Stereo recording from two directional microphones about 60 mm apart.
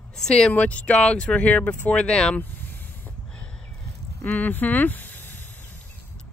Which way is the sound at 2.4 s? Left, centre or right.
Left.